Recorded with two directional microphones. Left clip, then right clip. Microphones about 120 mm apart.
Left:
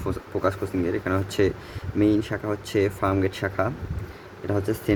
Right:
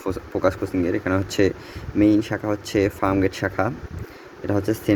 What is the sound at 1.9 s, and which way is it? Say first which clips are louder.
Speech: right 4 dB; 35° right (ahead or behind).